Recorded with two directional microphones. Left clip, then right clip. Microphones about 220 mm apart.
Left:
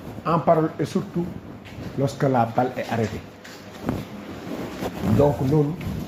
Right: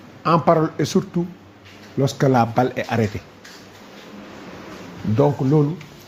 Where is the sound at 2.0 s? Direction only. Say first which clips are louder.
Right 3 dB; 50° right (ahead or behind).